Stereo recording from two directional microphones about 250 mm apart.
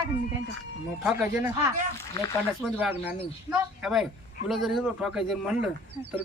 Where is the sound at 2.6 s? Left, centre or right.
Centre.